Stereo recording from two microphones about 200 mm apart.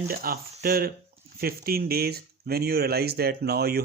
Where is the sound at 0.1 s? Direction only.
45° right (ahead or behind).